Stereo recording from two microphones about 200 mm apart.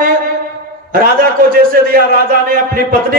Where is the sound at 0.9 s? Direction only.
45° right (ahead or behind).